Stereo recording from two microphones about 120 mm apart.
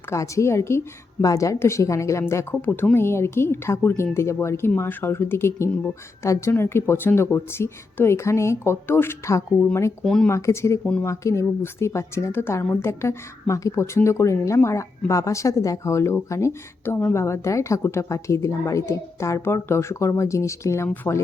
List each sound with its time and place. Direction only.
0.1 s speech: 25° left (ahead or behind)
10.0 s speech: 5° left (ahead or behind)
10.2 s speech: 25° left (ahead or behind)